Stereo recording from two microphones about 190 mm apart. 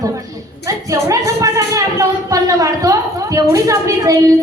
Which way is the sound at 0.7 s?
15° right (ahead or behind).